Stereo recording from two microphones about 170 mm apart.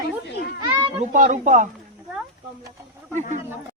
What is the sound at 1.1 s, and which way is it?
Speech, 50° right (ahead or behind).